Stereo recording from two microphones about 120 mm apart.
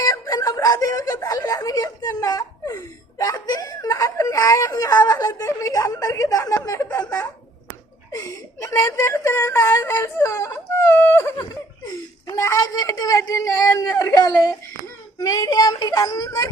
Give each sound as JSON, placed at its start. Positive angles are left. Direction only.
{"t": 0.0, "sound": "speech", "side_deg": 30}
{"t": 11.9, "sound": "speech", "side_deg": 30}
{"t": 15.3, "sound": "speech", "side_deg": 30}